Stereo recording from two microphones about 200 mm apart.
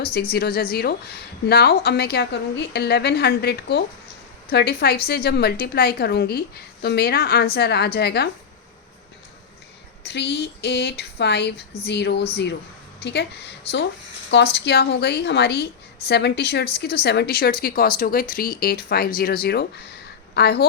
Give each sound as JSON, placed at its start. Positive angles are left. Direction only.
{"t": 0.0, "sound": "a woman's voice", "side_deg": 50}
{"t": 10.0, "sound": "a woman's voice", "side_deg": 55}